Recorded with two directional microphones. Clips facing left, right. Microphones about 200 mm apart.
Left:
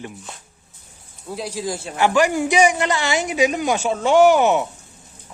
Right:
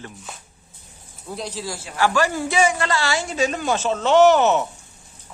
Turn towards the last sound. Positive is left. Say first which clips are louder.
# left 1 dB
turn(degrees=10)  # may be behind; listen again after turning